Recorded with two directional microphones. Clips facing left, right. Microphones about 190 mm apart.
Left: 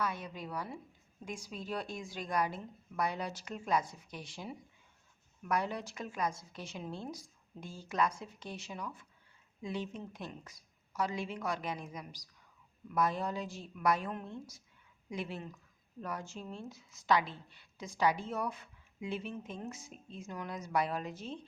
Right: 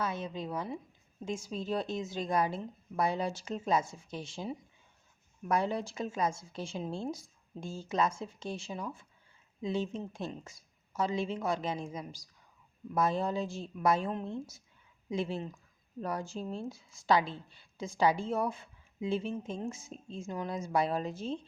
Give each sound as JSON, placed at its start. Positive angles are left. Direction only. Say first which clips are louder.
{"t": 0.0, "sound": "speech", "louder": "right 3 dB", "side_deg": -25}